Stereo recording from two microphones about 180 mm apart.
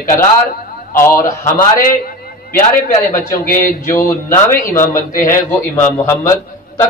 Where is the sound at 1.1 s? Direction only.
50° left (ahead or behind).